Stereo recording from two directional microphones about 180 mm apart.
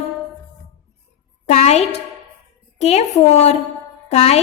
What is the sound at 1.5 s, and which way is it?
A woman's voice, 35° left (ahead or behind).